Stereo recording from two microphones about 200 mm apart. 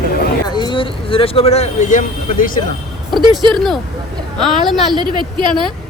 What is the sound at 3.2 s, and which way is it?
Speech, 25° right (ahead or behind).